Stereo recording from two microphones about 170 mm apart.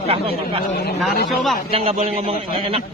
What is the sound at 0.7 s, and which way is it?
Speech, 65° left (ahead or behind).